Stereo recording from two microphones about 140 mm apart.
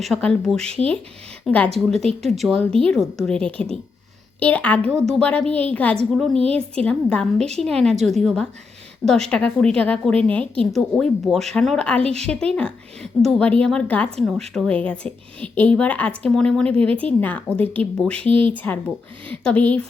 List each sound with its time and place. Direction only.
0.0 s a woman's voice: 5° left (ahead or behind)
6.4 s a woman's voice: 45° right (ahead or behind)
6.7 s a woman's voice: 5° left (ahead or behind)